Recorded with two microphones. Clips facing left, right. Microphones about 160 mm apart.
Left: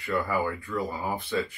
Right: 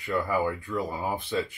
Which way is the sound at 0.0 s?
20° right (ahead or behind).